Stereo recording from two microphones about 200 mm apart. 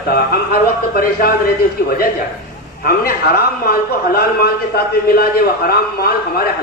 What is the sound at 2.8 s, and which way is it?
A man's voice, 50° left (ahead or behind).